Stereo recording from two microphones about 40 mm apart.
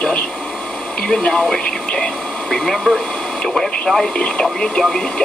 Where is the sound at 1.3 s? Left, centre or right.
Centre.